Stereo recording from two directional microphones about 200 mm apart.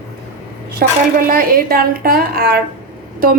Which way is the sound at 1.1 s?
45° right (ahead or behind).